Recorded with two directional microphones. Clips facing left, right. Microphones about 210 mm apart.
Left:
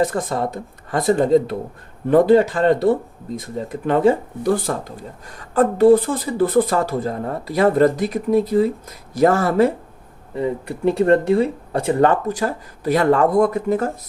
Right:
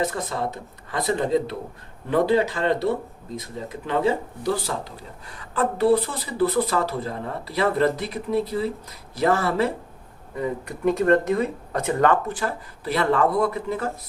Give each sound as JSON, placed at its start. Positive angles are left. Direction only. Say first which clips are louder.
{"t": 0.0, "sound": "speech", "louder": "left 6 dB", "side_deg": 50}
{"t": 10.3, "sound": "speech", "louder": "left 5 dB", "side_deg": 30}